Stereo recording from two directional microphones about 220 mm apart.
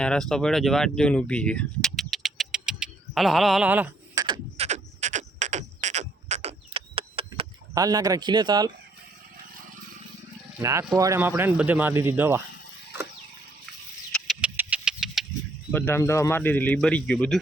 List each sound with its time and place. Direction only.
0.0 s a sound: 5° left (ahead or behind); by 7.4 s 25° right (ahead or behind)
7.7 s speech: 15° right (ahead or behind)
10.6 s speech: 15° right (ahead or behind)
14.1 s vehicle: 5° right (ahead or behind)
15.7 s speech: 10° left (ahead or behind)